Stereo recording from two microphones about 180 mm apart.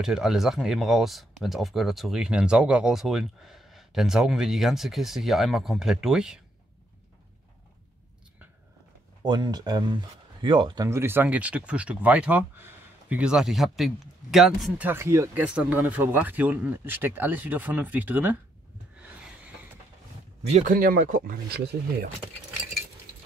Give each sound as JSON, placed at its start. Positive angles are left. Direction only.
{"t": 0.0, "sound": "speech", "side_deg": -5}
{"t": 9.2, "sound": "speech", "side_deg": -25}
{"t": 20.4, "sound": "speech", "side_deg": -40}